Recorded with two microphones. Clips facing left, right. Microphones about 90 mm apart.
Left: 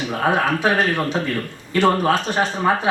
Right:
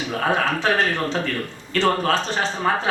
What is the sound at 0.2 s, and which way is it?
A man's voice, 15° left (ahead or behind).